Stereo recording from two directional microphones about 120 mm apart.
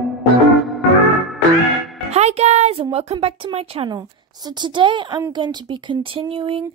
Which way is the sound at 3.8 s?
35° right (ahead or behind).